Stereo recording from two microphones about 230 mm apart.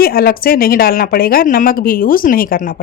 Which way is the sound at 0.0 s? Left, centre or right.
Left.